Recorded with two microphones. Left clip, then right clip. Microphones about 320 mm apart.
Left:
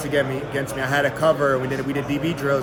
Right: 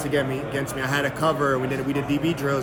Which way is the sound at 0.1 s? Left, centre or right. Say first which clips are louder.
Left 3 dB; centre.